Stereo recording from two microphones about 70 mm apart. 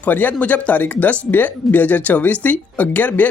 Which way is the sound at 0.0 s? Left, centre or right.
Left.